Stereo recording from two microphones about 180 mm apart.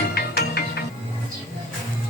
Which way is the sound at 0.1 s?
60° left (ahead or behind).